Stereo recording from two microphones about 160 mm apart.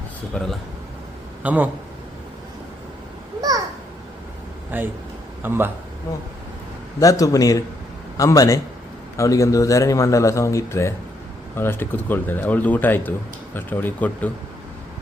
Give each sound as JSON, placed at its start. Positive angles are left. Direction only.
{"t": 0.4, "sound": "speech", "side_deg": 5}
{"t": 1.4, "sound": "a man's voice", "side_deg": -10}
{"t": 4.7, "sound": "a man's voice", "side_deg": -10}
{"t": 7.0, "sound": "a man's voice", "side_deg": 20}